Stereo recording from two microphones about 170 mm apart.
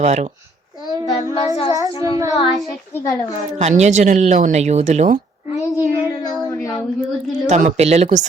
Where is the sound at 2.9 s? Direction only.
15° left (ahead or behind).